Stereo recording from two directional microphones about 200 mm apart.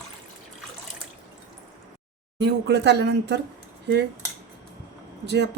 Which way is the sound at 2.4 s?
60° right (ahead or behind).